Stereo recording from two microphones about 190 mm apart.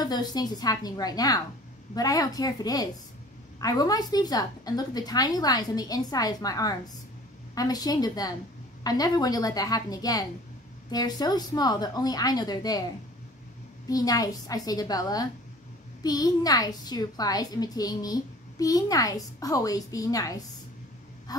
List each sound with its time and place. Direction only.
0.0 s a child's voice: 20° left (ahead or behind)
13.8 s a child's voice: 20° left (ahead or behind)